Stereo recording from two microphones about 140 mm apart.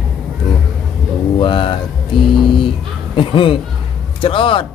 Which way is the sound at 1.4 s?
35° left (ahead or behind).